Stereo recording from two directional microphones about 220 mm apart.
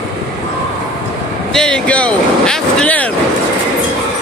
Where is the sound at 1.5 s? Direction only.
5° left (ahead or behind).